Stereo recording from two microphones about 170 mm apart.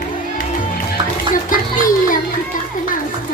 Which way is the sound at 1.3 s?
55° left (ahead or behind).